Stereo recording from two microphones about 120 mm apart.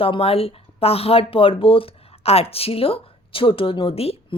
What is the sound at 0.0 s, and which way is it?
A woman's voice, 50° left (ahead or behind).